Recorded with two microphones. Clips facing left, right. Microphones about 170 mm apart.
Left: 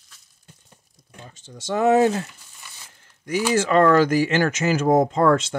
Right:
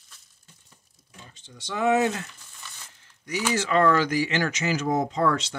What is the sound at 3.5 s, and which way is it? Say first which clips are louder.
Speech: left 5 dB; 50° left (ahead or behind).